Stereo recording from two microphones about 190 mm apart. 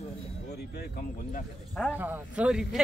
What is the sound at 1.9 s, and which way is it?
Speech, 10° right (ahead or behind).